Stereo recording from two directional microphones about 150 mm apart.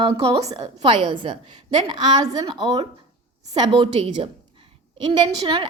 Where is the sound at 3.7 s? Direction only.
35° right (ahead or behind).